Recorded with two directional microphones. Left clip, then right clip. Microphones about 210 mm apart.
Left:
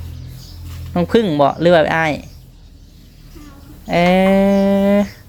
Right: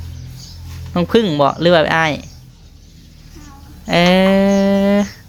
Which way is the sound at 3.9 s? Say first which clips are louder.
Right 1 dB; 5° right (ahead or behind).